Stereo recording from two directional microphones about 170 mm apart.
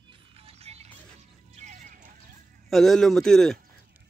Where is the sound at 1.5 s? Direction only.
45° right (ahead or behind).